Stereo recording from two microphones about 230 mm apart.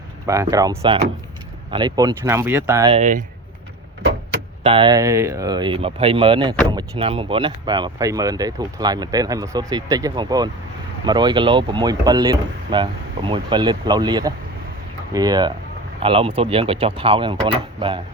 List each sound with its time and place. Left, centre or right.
0.5 s speech: centre
2.9 s speech: right
4.6 s speech: right